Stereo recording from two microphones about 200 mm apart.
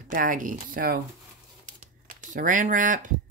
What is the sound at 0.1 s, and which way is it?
Speech, 45° right (ahead or behind).